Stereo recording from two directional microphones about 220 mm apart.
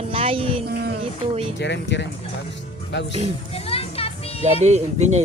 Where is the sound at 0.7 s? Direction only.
45° right (ahead or behind).